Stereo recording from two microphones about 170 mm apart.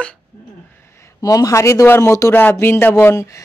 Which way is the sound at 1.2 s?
20° left (ahead or behind).